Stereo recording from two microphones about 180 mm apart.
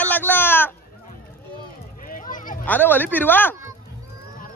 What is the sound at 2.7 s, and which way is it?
Speech, 10° left (ahead or behind).